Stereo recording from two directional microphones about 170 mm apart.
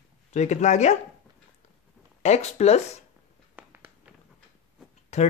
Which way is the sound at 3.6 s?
10° right (ahead or behind).